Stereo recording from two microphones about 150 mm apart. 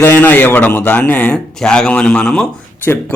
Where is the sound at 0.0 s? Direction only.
15° left (ahead or behind).